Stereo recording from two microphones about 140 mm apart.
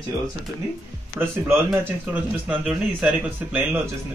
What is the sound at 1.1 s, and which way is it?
A man's voice, 15° right (ahead or behind).